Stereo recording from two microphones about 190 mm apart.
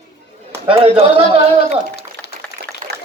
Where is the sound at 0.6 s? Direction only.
30° right (ahead or behind).